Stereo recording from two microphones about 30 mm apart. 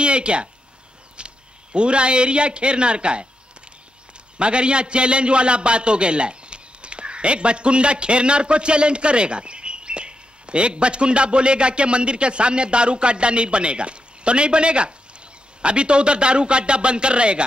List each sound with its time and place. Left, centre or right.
0.0 s a man's voice: right
4.4 s a man's voice: right